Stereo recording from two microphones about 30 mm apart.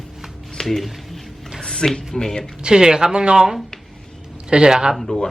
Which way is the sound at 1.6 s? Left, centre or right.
Left.